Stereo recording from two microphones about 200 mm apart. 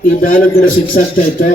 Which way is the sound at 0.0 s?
45° left (ahead or behind).